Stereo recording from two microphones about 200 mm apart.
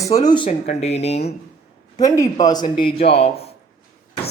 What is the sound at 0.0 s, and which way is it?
Speech, 20° left (ahead or behind).